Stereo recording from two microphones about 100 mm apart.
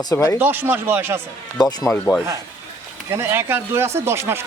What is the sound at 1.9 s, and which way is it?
Speech, 10° left (ahead or behind).